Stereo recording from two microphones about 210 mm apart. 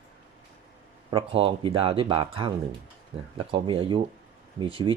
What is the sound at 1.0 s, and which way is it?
Speech, 25° right (ahead or behind).